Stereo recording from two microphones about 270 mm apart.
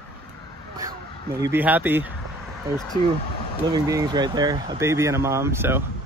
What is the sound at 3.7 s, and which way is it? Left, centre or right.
Speech, centre.